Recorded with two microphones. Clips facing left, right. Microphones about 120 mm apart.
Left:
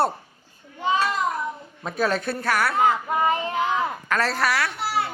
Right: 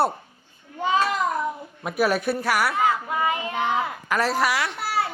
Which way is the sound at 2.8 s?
30° left (ahead or behind).